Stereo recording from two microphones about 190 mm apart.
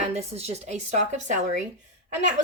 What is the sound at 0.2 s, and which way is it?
Speech, 35° right (ahead or behind).